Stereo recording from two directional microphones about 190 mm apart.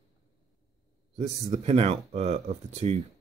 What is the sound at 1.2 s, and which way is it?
Speech, 35° right (ahead or behind).